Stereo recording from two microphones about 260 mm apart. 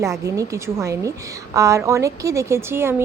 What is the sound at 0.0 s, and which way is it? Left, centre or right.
Speech, centre.